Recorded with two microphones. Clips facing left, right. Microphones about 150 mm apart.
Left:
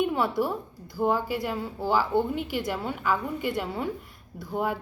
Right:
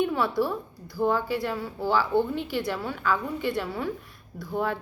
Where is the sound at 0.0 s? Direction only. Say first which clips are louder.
Even; 15° left (ahead or behind).